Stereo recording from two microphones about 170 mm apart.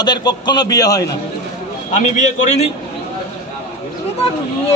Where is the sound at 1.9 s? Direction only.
45° left (ahead or behind).